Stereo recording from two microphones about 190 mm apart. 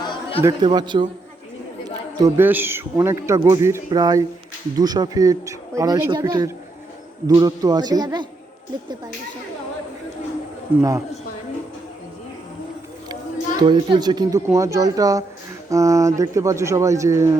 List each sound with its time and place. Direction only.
0.0 s chatter: 25° left (ahead or behind)
0.4 s speech: 20° right (ahead or behind)
2.2 s speech: 10° right (ahead or behind)
10.7 s speech: 10° right (ahead or behind)
13.6 s speech: 25° right (ahead or behind)